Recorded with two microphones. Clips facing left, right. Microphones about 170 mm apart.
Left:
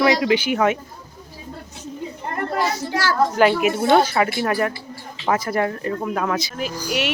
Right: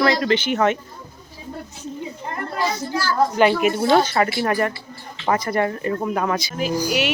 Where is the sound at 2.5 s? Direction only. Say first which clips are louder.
Even; 80° left.